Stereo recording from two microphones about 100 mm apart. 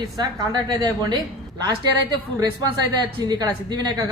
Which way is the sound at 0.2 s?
45° right (ahead or behind).